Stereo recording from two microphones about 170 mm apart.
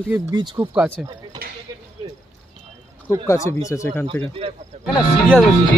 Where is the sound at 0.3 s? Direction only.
25° right (ahead or behind).